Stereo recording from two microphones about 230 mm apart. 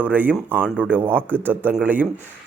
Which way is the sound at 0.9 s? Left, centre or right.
Centre.